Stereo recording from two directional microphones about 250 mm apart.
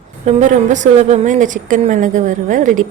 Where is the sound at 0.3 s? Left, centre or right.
Right.